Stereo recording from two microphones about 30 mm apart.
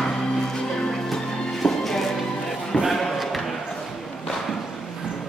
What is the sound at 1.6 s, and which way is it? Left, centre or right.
Music, centre.